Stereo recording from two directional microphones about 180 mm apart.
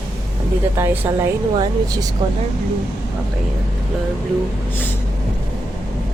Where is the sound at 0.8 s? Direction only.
15° right (ahead or behind).